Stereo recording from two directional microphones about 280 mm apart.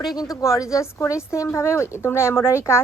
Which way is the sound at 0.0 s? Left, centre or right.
Centre.